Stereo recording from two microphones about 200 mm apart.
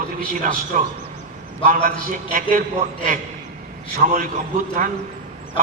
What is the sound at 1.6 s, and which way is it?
A man's voice, 40° right (ahead or behind).